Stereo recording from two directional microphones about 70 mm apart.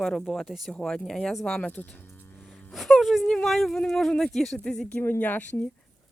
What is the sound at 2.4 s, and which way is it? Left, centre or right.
Wail, centre.